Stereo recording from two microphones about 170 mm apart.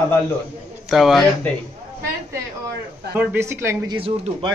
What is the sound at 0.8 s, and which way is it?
Speech, centre (ahead or behind).